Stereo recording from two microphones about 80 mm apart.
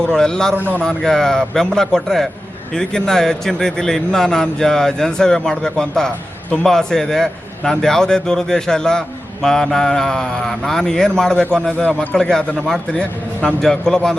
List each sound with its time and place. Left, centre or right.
0.0 s a man's voice: centre